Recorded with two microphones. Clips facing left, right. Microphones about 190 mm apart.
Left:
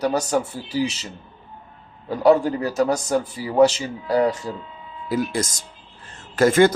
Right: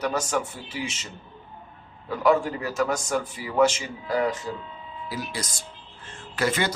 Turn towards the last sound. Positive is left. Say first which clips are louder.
# left 10 dB
turn(degrees=45)  # may be behind; listen again after turning